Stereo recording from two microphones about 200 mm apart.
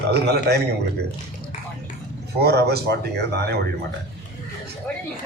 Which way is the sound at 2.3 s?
55° right (ahead or behind).